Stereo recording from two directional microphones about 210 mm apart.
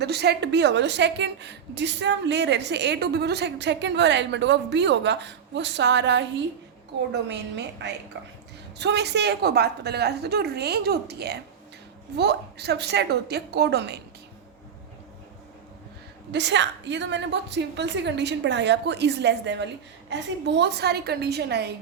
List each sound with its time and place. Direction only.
0.0 s a woman's voice: 50° right (ahead or behind)
16.3 s a woman's voice: 55° right (ahead or behind)